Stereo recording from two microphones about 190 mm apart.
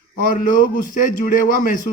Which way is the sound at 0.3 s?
45° left (ahead or behind).